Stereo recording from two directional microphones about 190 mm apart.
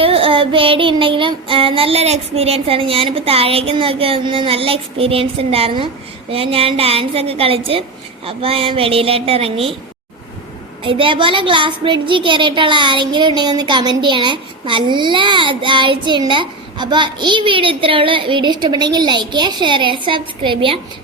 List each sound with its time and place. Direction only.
0.0 s a woman's voice: 30° right (ahead or behind)
10.8 s speech: 25° right (ahead or behind)